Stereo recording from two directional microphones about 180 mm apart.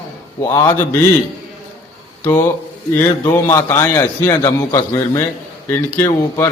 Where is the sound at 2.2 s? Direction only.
15° left (ahead or behind).